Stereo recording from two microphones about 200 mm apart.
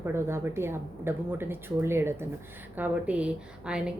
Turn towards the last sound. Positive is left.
turn(degrees=-5)  # may be behind; listen again after turning